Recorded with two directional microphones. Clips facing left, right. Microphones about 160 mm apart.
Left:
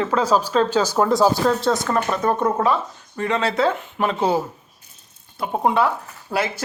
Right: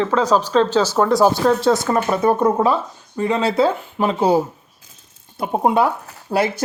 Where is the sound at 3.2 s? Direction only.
30° right (ahead or behind).